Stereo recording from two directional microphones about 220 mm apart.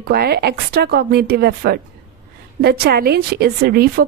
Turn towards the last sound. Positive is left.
turn(degrees=-45)  # may be behind; listen again after turning